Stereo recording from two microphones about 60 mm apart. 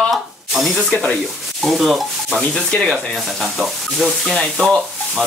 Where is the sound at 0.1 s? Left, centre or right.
Centre.